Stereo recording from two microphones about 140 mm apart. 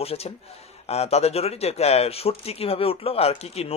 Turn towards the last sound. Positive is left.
turn(degrees=45)  # may be behind; listen again after turning